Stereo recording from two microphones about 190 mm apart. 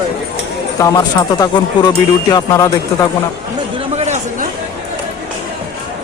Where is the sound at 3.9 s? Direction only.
35° right (ahead or behind).